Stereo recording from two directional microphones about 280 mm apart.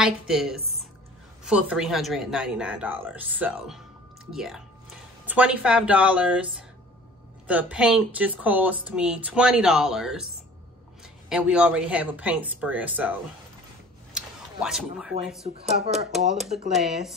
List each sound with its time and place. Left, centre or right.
0.0 s speech: centre
7.4 s speech: centre
11.2 s speech: centre
14.1 s a sound: centre
15.4 s speech: right
16.7 s speech: centre